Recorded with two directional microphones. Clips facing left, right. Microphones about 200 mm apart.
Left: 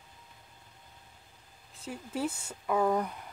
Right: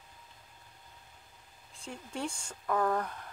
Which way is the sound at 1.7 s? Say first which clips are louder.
Left 4 dB; 5° left (ahead or behind).